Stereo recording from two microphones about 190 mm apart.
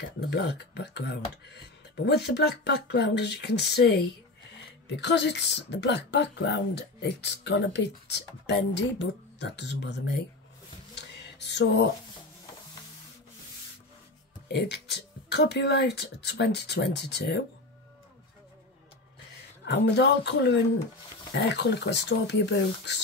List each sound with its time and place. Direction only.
0.0 s speech: 60° left (ahead or behind)
11.0 s a sound: 65° left (ahead or behind)
14.5 s speech: 60° left (ahead or behind)
19.6 s speech: 65° left (ahead or behind)